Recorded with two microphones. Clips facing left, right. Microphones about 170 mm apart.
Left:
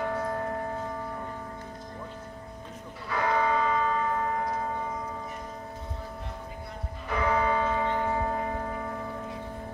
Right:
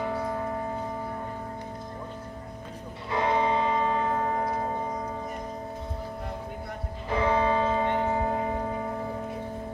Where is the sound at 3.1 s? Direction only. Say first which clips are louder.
Right 1 dB; 25° right (ahead or behind).